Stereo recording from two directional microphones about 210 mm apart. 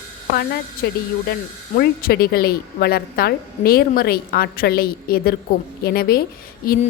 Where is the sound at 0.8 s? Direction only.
50° left (ahead or behind).